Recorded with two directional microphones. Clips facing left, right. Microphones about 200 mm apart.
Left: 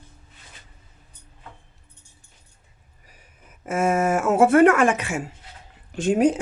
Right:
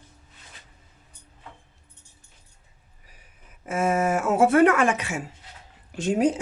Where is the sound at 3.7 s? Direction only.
50° left (ahead or behind).